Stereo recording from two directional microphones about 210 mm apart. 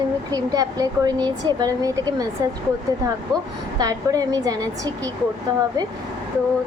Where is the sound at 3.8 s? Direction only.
15° right (ahead or behind).